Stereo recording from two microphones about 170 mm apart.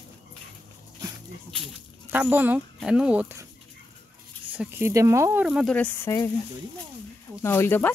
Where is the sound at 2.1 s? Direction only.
10° right (ahead or behind).